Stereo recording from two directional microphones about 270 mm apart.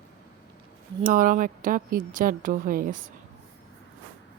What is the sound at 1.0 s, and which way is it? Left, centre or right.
Speech, right.